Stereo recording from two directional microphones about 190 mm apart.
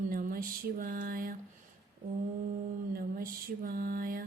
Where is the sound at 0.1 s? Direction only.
50° right (ahead or behind).